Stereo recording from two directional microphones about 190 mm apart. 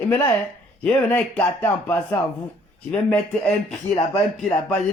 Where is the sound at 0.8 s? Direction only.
5° left (ahead or behind).